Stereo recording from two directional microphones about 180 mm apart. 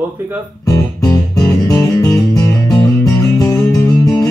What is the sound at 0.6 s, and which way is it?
Music, 20° left (ahead or behind).